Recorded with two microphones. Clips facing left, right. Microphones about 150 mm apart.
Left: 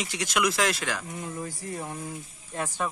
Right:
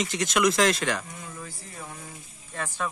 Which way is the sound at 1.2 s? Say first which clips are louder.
Left 6 dB; 35° left (ahead or behind).